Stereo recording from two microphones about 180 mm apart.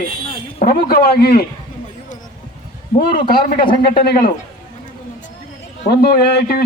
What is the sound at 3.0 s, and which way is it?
A man's voice, 55° left (ahead or behind).